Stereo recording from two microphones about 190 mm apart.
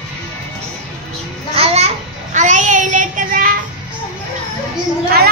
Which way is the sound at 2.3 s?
40° right (ahead or behind).